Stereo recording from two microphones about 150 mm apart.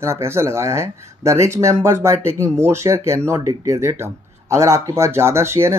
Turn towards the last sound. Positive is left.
turn(degrees=-20)  # may be behind; listen again after turning